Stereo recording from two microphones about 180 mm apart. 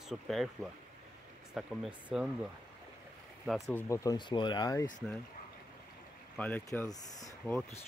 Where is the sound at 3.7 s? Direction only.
15° left (ahead or behind).